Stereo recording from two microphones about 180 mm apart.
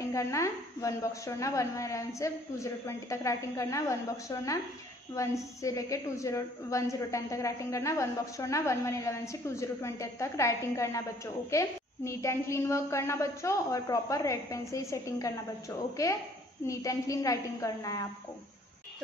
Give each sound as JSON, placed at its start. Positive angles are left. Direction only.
{"t": 0.0, "sound": "a woman's voice", "side_deg": 15}